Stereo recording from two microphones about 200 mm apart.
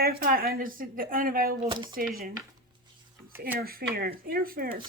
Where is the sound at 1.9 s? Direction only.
45° right (ahead or behind).